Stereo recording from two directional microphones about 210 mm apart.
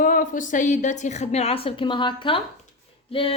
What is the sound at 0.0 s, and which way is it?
Speech, 40° left (ahead or behind).